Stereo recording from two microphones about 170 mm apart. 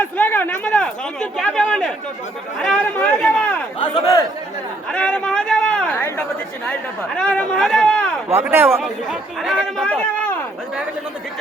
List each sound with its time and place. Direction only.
0.0 s chatter: 10° left (ahead or behind)
2.6 s speech: 5° left (ahead or behind)
3.8 s a man's voice: 20° left (ahead or behind)
4.9 s a sound: 5° left (ahead or behind)
7.2 s speech: 5° left (ahead or behind)
8.3 s speech: 15° right (ahead or behind)
8.8 s speech: centre (ahead or behind)